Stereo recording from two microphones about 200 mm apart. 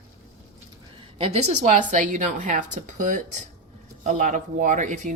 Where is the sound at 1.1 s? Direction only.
30° right (ahead or behind).